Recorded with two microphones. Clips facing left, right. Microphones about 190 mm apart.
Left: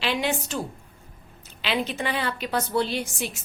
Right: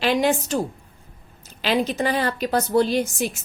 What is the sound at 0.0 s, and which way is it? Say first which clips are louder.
Speech: right 6 dB; 45° right (ahead or behind).